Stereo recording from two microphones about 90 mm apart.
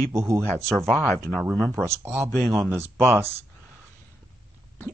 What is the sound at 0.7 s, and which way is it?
Speech, centre (ahead or behind).